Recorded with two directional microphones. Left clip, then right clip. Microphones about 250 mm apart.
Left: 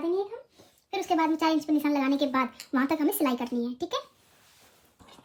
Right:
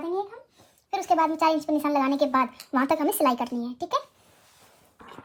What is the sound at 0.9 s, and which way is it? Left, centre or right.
A child's voice, centre.